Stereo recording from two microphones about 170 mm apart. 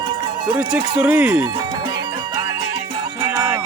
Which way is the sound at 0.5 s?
5° right (ahead or behind).